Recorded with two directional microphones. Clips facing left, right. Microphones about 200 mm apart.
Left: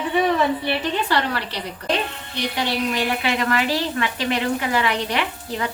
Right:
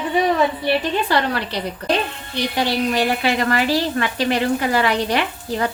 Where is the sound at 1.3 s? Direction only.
45° right (ahead or behind).